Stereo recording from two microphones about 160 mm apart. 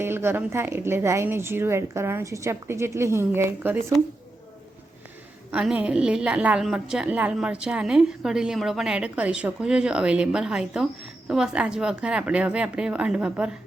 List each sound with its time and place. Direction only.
0.0 s a woman's voice: 15° right (ahead or behind)
5.5 s a woman's voice: 10° right (ahead or behind)